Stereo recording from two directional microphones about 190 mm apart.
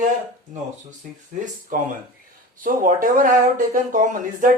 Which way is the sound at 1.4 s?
40° right (ahead or behind).